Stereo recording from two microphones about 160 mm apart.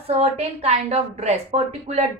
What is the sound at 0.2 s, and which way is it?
A woman's voice, 40° right (ahead or behind).